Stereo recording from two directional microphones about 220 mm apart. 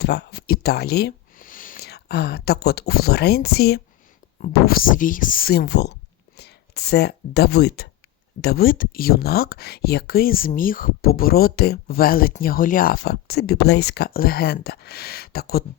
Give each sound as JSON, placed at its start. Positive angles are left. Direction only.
{"t": 0.0, "sound": "speech", "side_deg": 50}